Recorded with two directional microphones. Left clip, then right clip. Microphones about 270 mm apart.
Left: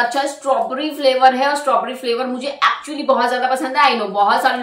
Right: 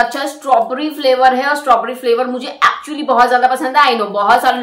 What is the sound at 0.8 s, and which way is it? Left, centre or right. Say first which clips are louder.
A woman's voice: left 1 dB; centre.